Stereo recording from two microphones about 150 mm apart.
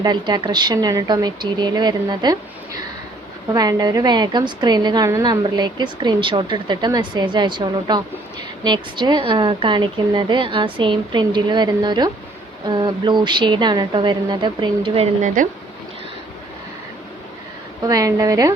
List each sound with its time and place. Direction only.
0.0 s a woman's voice: 30° right (ahead or behind)
17.8 s a woman's voice: 25° right (ahead or behind)